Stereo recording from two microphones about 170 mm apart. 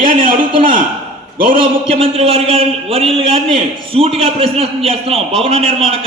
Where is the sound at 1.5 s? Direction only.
35° right (ahead or behind).